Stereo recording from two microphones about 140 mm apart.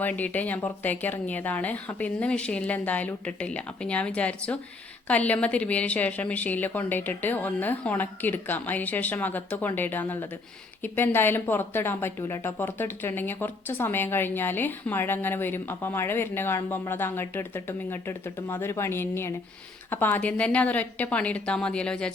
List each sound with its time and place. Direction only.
0.0 s speech: 10° left (ahead or behind)